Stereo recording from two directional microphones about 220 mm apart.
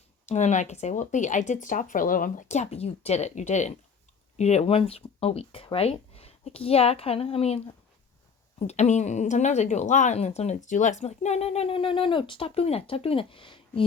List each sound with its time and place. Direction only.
0.3 s speech: 30° left (ahead or behind)